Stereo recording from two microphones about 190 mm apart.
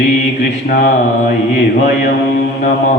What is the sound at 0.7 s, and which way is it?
Mantra, 50° left (ahead or behind).